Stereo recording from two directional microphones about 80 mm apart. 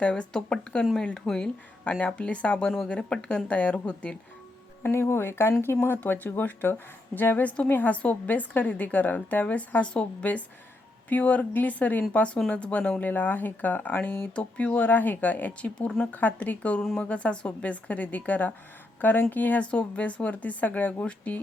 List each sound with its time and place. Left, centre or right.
0.0 s speech: centre
4.8 s a woman's voice: left; by 21.4 s centre